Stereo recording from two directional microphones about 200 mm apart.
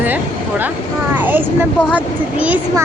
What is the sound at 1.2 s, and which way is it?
Speech, 10° right (ahead or behind).